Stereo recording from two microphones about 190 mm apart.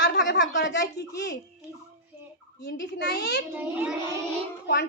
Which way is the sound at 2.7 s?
65° left (ahead or behind).